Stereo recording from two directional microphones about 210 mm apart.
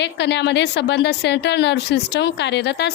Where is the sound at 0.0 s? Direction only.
55° left (ahead or behind).